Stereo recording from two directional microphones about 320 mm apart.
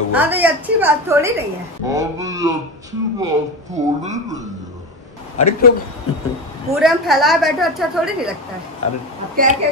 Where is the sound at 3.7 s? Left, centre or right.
Right.